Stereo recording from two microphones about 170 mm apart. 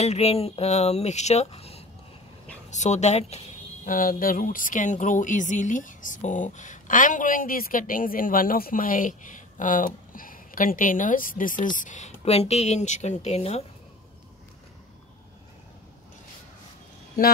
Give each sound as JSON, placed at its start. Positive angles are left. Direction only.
{"t": 0.0, "sound": "speech", "side_deg": 40}
{"t": 3.9, "sound": "speech", "side_deg": 55}